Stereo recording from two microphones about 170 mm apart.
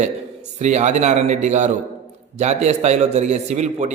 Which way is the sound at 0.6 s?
45° right (ahead or behind).